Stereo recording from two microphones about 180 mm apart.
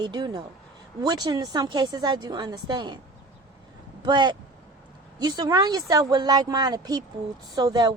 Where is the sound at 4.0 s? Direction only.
25° right (ahead or behind).